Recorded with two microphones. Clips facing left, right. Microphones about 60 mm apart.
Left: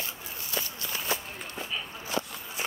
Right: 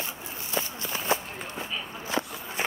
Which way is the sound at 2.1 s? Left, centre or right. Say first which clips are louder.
Right 3 dB; right.